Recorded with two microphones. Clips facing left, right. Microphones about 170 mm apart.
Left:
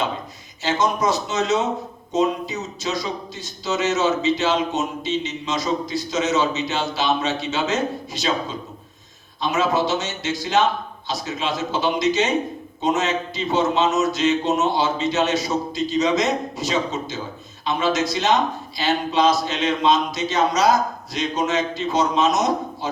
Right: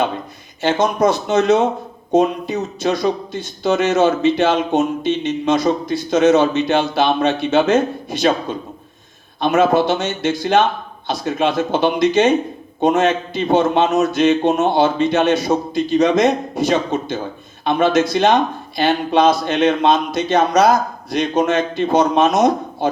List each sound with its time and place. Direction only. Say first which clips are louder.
0.6 s speech: right 5 dB; 55° right (ahead or behind)